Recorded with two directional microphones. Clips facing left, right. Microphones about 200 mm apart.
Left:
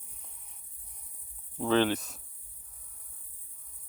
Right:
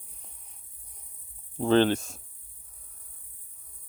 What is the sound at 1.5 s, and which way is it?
Speech, 30° right (ahead or behind).